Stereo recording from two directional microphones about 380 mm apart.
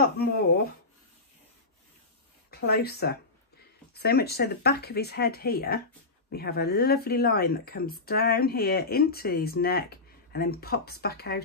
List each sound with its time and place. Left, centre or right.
0.0 s speech: left
2.5 s speech: left